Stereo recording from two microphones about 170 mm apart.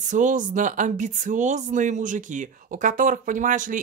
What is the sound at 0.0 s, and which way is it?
Speech, 50° right (ahead or behind).